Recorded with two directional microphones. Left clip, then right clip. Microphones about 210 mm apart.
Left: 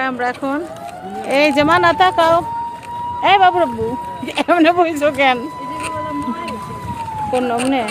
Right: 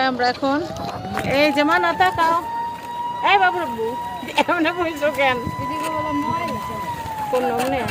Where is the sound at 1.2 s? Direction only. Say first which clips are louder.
Left 4 dB; 35° left (ahead or behind); by 5.3 s 50° left (ahead or behind).